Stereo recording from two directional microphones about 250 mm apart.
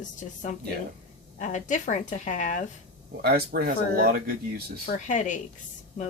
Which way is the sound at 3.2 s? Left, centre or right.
Right.